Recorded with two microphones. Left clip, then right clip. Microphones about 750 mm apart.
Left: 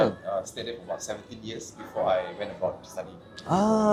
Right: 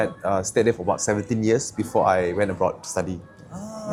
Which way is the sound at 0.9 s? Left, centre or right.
Right.